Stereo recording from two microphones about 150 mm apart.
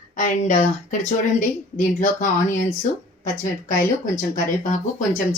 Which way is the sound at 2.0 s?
60° left (ahead or behind).